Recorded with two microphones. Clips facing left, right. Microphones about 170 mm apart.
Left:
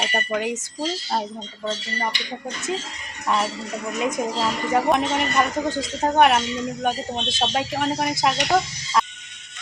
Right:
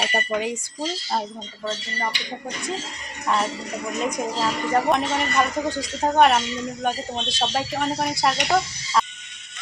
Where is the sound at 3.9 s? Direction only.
5° left (ahead or behind).